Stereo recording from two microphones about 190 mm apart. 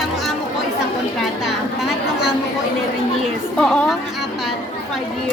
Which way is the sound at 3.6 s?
5° left (ahead or behind).